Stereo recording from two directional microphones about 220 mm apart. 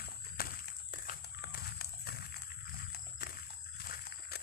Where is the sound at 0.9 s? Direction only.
40° left (ahead or behind).